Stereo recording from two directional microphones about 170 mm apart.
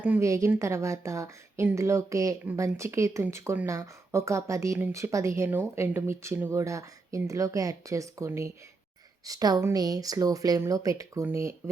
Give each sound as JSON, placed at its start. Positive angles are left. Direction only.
{"t": 0.0, "sound": "a woman's voice", "side_deg": -15}